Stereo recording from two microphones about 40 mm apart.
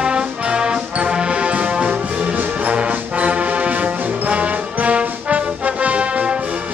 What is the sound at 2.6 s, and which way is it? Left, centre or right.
Brass instrument, right.